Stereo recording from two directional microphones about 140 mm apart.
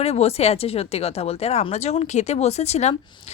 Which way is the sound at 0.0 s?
50° left (ahead or behind).